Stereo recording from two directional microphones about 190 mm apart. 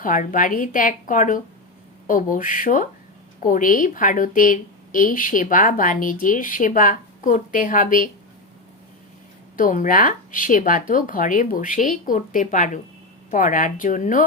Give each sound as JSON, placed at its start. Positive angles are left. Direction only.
{"t": 0.0, "sound": "a woman's voice", "side_deg": 45}
{"t": 9.6, "sound": "a woman's voice", "side_deg": 45}